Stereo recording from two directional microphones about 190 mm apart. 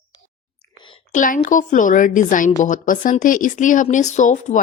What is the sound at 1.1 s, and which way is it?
A woman's voice, 45° left (ahead or behind).